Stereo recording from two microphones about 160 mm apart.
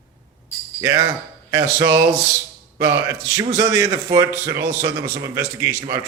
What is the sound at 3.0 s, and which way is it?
Speech, 20° right (ahead or behind).